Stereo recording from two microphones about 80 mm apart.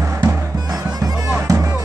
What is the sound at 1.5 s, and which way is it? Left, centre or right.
Music, right.